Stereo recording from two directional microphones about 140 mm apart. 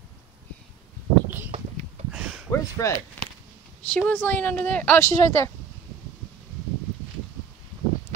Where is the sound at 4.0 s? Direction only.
10° left (ahead or behind).